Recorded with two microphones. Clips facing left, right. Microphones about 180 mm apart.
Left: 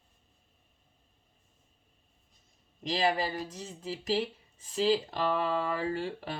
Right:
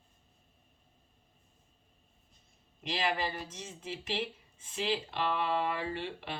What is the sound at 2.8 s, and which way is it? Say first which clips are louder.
Speech: left 4 dB; 35° left (ahead or behind).